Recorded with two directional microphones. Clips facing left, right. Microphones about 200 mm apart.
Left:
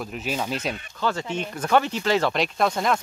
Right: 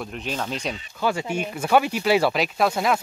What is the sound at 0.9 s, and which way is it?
Speech, 10° right (ahead or behind).